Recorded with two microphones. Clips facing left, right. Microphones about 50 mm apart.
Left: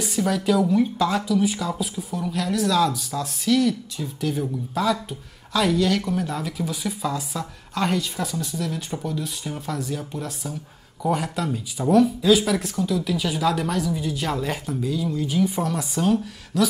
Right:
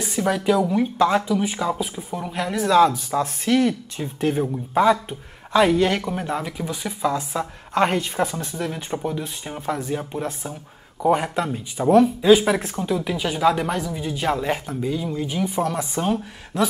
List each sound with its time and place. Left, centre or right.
0.0 s speech: right
7.2 s speech: right; by 15.7 s centre
15.7 s speech: right